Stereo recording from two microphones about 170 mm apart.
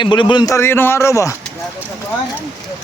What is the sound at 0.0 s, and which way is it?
Speech, 25° left (ahead or behind).